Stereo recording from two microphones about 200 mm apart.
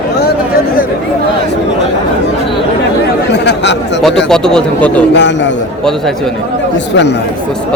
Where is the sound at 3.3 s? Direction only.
60° left (ahead or behind).